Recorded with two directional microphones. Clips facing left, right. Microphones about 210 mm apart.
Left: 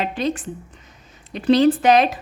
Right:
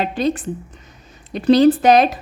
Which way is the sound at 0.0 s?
35° right (ahead or behind).